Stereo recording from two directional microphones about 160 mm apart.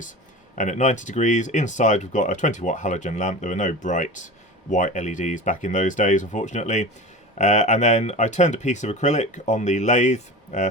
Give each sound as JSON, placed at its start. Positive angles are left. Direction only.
{"t": 0.5, "sound": "speech", "side_deg": 50}